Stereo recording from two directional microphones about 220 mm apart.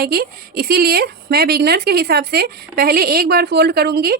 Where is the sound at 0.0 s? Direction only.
40° right (ahead or behind).